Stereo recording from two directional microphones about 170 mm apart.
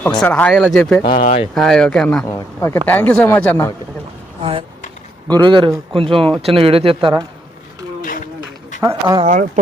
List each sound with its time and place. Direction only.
0.0 s a man's voice: 5° left (ahead or behind)
2.2 s a man's voice: 20° left (ahead or behind)
5.3 s speech: 30° right (ahead or behind)
8.0 s a sound: 55° left (ahead or behind)
8.8 s speech: 20° right (ahead or behind)
9.2 s speech: 50° right (ahead or behind)